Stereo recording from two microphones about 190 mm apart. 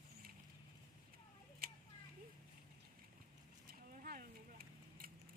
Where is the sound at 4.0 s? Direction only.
50° right (ahead or behind).